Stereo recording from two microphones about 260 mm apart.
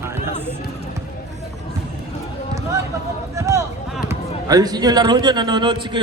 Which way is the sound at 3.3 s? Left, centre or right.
Centre.